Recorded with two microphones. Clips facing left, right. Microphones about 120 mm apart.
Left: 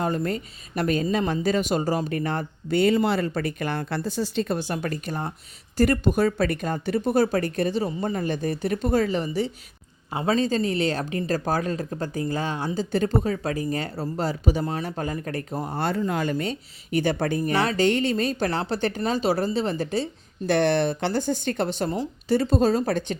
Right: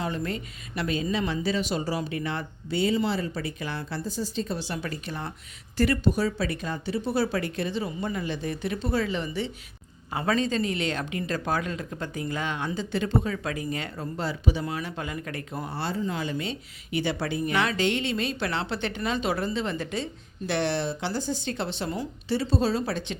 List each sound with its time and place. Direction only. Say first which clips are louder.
0.0 s speech: left 5 dB; 45° left (ahead or behind)
10.1 s a woman's voice: left 3 dB; 25° left (ahead or behind)
20.5 s speech: left 6 dB; 55° left (ahead or behind)